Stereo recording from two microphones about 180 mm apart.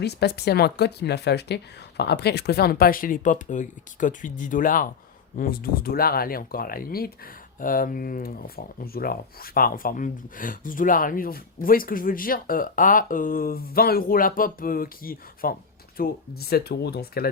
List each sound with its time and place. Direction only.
0.0 s speech: 65° left (ahead or behind)